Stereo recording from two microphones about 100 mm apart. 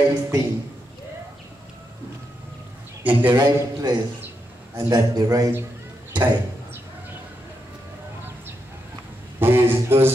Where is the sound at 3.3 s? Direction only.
45° right (ahead or behind).